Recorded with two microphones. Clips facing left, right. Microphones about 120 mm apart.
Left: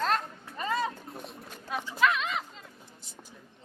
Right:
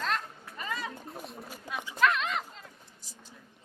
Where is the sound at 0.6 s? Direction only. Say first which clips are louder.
Left 7 dB; 35° left (ahead or behind).